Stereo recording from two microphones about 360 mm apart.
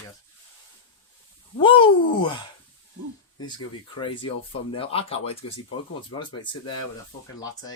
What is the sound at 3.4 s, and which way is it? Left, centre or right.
Speech, centre.